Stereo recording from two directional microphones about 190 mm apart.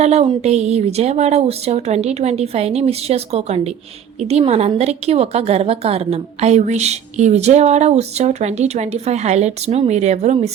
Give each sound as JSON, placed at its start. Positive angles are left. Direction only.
{"t": 0.0, "sound": "a woman's voice", "side_deg": -35}